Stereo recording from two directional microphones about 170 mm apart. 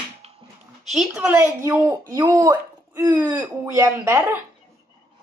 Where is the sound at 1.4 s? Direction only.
10° right (ahead or behind).